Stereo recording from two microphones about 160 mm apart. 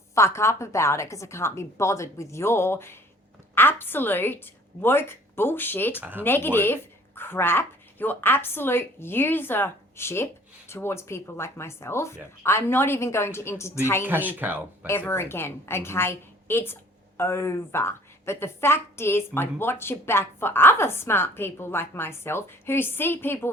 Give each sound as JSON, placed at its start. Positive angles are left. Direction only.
{"t": 0.1, "sound": "a woman's voice", "side_deg": 15}
{"t": 6.0, "sound": "speech", "side_deg": -10}
{"t": 6.2, "sound": "a woman's voice", "side_deg": 15}
{"t": 14.0, "sound": "speech", "side_deg": -10}
{"t": 14.8, "sound": "a woman's voice", "side_deg": 15}